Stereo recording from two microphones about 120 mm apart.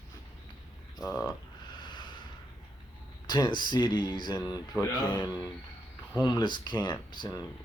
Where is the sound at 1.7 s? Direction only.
40° left (ahead or behind).